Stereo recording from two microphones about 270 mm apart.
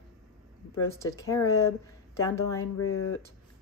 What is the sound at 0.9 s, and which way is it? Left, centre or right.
Speech, centre.